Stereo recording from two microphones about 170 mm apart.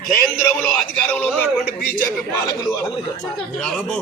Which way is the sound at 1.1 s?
10° left (ahead or behind).